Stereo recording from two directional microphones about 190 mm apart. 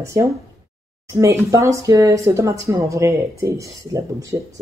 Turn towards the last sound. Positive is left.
turn(degrees=-15)  # may be behind; listen again after turning